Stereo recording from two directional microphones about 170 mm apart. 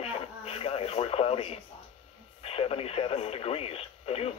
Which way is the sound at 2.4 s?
35° left (ahead or behind).